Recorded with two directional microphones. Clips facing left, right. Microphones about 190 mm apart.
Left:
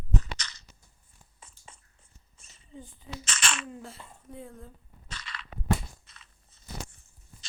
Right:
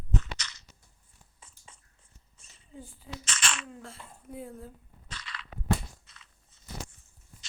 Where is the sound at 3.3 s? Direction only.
50° left (ahead or behind).